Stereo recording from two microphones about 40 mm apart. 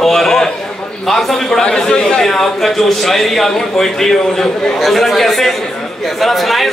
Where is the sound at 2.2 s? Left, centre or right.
Centre.